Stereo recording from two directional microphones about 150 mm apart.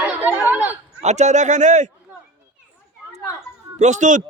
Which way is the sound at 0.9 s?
50° right (ahead or behind).